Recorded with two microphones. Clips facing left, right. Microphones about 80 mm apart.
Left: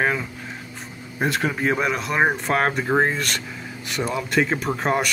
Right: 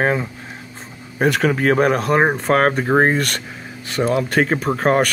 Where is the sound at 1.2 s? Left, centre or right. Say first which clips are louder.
Right 6 dB; right.